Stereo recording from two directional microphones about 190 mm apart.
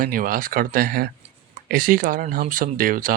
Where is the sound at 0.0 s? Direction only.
50° right (ahead or behind).